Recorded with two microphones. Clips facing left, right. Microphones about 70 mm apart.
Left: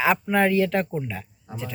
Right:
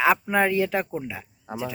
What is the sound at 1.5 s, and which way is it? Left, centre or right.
Speech, right.